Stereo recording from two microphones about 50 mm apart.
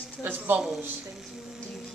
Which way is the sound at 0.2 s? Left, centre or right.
Right.